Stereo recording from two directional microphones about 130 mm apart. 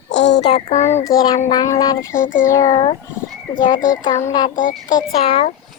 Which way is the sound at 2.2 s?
90° left.